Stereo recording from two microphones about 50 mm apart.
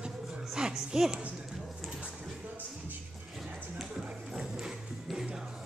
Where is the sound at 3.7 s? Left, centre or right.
Centre.